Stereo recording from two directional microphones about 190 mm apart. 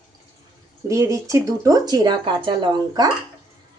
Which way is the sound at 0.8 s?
15° right (ahead or behind).